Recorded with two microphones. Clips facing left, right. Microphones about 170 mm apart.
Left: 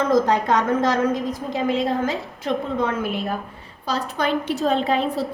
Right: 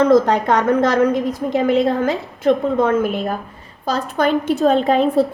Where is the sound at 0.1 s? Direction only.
65° right (ahead or behind).